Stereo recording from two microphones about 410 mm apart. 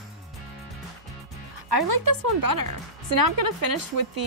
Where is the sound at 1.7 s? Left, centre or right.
Right.